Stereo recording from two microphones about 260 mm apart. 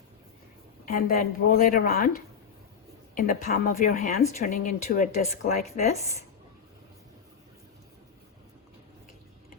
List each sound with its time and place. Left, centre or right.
0.9 s a woman's voice: left